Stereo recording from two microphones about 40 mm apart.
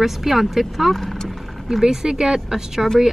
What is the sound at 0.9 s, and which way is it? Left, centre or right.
Speech, centre.